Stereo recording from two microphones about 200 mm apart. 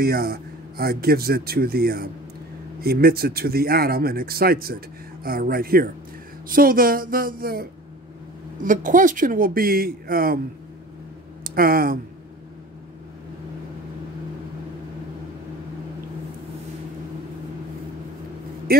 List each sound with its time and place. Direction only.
0.0 s speech: 50° right (ahead or behind)
8.6 s speech: 40° right (ahead or behind)
11.4 s speech: 45° right (ahead or behind)
18.7 s speech: 50° right (ahead or behind)